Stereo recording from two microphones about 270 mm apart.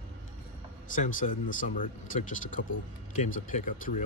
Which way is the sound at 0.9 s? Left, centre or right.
Left.